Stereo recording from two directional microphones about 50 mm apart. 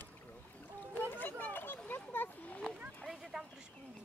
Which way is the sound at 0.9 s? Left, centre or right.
Left.